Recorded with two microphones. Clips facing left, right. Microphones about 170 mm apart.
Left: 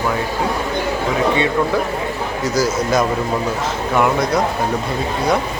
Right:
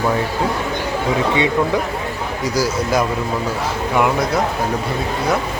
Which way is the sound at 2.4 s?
10° right (ahead or behind).